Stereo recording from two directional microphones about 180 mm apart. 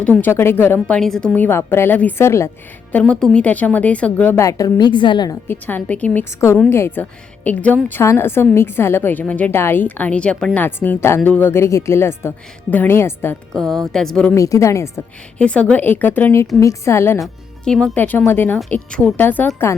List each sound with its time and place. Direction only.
0.0 s a woman's voice: 10° left (ahead or behind)
5.5 s a woman's voice: 10° left (ahead or behind)
13.6 s speech: centre (ahead or behind)
14.3 s a woman's voice: 15° left (ahead or behind)
17.7 s a woman's voice: 5° left (ahead or behind)